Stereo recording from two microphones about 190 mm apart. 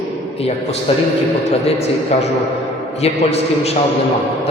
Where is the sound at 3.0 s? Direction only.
35° left (ahead or behind).